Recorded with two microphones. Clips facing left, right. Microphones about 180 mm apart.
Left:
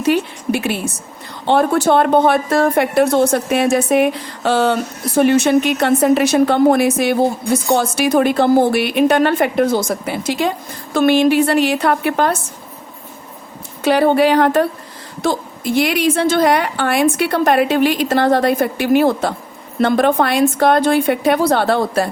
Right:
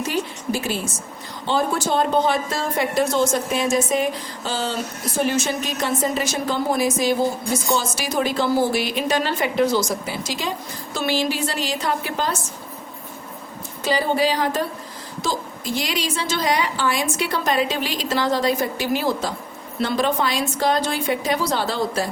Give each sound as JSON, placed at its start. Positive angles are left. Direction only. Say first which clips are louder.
{"t": 0.0, "sound": "a woman's voice", "louder": "left 8 dB", "side_deg": 65}
{"t": 13.8, "sound": "speech", "louder": "left 8 dB", "side_deg": 60}